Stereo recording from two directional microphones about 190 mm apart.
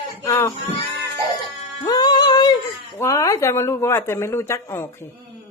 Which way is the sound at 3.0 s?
15° left (ahead or behind).